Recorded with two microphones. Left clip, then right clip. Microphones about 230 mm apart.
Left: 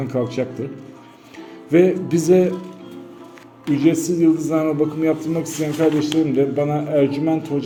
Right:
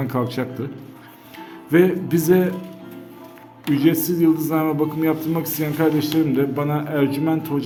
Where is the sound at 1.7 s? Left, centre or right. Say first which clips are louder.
Left 2 dB; centre.